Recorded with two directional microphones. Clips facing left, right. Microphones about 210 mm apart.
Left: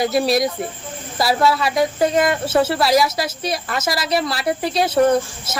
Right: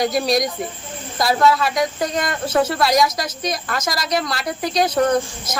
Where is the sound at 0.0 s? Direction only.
5° left (ahead or behind).